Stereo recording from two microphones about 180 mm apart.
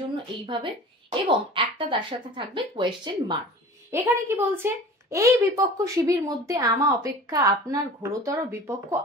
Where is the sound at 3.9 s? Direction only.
15° right (ahead or behind).